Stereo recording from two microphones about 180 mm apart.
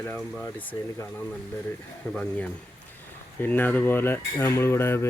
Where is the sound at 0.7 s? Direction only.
25° left (ahead or behind).